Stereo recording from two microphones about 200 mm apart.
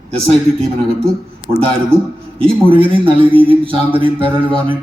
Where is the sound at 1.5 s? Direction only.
25° right (ahead or behind).